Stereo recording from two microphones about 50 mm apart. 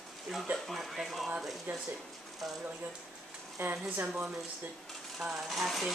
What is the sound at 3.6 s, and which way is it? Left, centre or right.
Speech, right.